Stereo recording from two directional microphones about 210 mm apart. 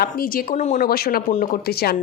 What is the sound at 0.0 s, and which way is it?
A woman's voice, 45° left (ahead or behind).